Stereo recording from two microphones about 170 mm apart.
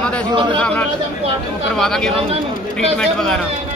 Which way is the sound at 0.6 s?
5° left (ahead or behind).